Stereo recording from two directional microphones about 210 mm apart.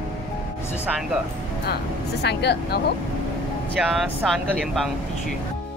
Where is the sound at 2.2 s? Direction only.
50° left (ahead or behind).